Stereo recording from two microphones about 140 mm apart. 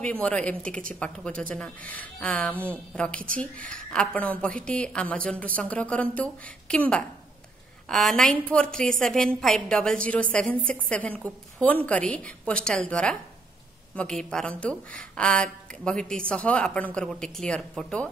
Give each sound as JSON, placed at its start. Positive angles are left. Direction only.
{"t": 0.0, "sound": "a woman's voice", "side_deg": 10}
{"t": 2.5, "sound": "speech", "side_deg": -15}
{"t": 3.3, "sound": "a woman's voice", "side_deg": 10}